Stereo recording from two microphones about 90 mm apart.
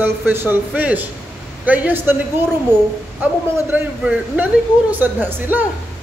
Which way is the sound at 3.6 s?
20° right (ahead or behind).